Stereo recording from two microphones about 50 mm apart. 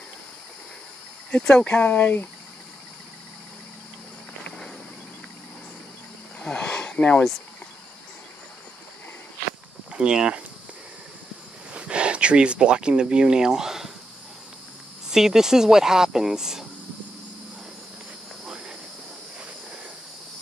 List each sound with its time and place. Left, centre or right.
1.8 s speech: left
6.4 s a sound: centre
9.9 s speech: centre
11.7 s speech: right
15.0 s speech: centre